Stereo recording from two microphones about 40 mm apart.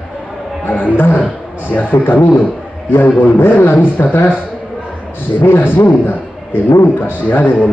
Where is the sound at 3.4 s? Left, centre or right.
Left.